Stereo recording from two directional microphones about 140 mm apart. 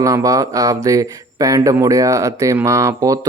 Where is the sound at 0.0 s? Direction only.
25° right (ahead or behind).